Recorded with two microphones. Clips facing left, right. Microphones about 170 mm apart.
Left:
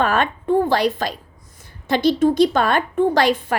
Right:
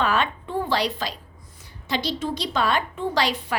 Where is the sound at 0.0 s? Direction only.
50° left (ahead or behind).